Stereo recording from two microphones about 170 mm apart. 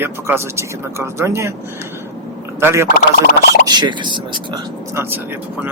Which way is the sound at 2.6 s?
15° right (ahead or behind).